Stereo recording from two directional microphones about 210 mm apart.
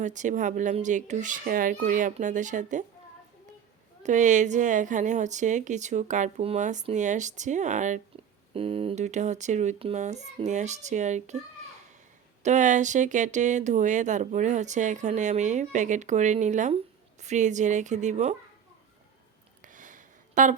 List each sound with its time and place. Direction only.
0.0 s a woman's voice: 35° right (ahead or behind)
4.0 s a woman's voice: 35° right (ahead or behind)
12.4 s a woman's voice: 35° right (ahead or behind)
19.6 s a sound: 40° right (ahead or behind)